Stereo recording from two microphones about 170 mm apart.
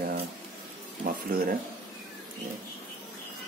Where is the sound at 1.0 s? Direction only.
60° right (ahead or behind).